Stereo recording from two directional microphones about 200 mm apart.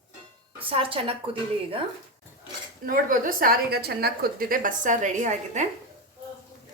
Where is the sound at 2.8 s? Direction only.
45° right (ahead or behind).